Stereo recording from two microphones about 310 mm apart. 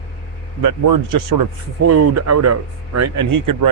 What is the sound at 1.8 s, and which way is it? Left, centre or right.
Speech, right.